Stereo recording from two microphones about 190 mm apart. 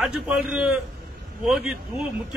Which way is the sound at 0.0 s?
5° right (ahead or behind).